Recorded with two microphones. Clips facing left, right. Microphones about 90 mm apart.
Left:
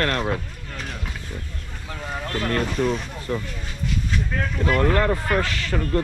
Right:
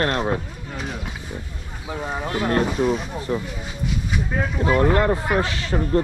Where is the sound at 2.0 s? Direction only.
15° right (ahead or behind).